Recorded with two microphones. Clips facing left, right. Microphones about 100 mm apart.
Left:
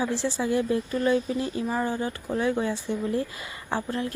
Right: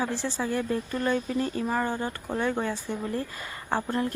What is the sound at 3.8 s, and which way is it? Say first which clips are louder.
Speech: right 2 dB; 30° right (ahead or behind).